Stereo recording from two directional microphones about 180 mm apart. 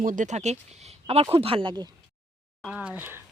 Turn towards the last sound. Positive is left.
turn(degrees=-10)  # may be behind; listen again after turning